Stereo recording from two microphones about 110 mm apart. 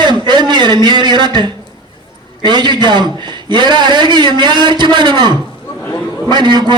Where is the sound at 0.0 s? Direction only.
45° right (ahead or behind).